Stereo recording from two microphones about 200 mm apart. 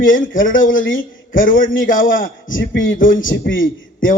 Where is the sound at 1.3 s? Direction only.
45° left (ahead or behind).